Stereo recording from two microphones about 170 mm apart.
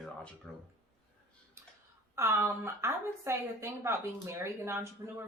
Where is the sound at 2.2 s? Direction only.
15° right (ahead or behind).